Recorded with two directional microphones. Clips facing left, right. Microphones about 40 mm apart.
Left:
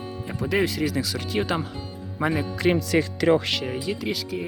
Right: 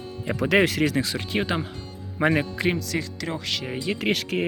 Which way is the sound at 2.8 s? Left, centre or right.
Left.